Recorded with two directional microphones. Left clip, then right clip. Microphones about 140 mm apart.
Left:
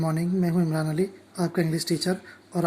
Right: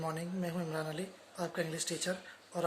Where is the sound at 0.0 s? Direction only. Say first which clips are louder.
Left 11 dB; 30° left (ahead or behind).